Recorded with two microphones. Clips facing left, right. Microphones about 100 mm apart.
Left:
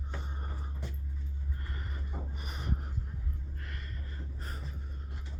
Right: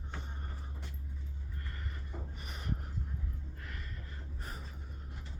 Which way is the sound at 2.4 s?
Centre (ahead or behind).